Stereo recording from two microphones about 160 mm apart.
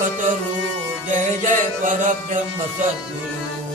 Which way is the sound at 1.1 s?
50° right (ahead or behind).